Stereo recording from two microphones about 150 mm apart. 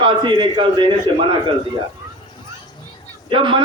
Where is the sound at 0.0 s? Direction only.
30° right (ahead or behind).